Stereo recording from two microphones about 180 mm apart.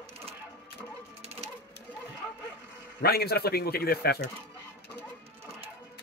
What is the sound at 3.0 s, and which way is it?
Speech, 60° left (ahead or behind).